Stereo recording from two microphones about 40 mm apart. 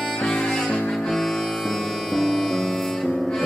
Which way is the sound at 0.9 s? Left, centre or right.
Centre.